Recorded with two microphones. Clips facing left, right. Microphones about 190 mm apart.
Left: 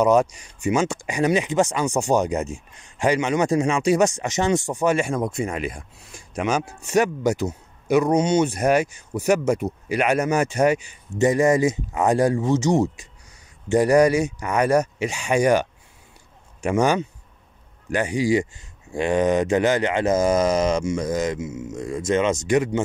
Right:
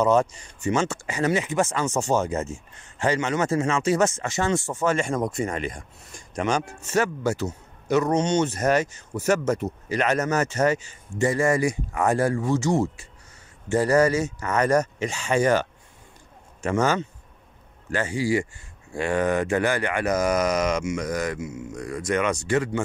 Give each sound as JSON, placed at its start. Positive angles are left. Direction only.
{"t": 0.0, "sound": "speech", "side_deg": 10}